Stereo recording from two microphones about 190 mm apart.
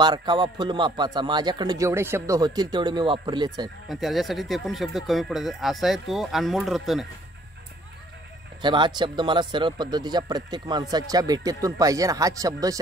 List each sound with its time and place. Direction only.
0.0 s speech: 25° right (ahead or behind)
3.9 s speech: centre (ahead or behind)
8.5 s speech: 25° right (ahead or behind)